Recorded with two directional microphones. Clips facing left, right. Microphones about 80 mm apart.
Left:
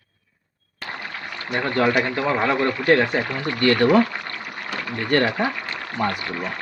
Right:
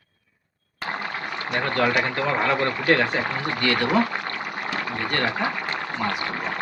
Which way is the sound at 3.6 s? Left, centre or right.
Left.